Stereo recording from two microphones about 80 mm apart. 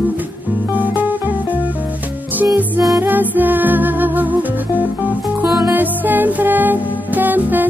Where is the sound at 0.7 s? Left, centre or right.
Right.